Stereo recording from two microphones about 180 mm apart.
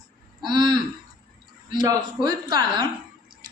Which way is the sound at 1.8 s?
25° right (ahead or behind).